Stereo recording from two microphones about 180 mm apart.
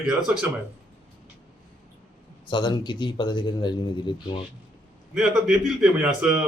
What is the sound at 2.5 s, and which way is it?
Speech, 25° left (ahead or behind).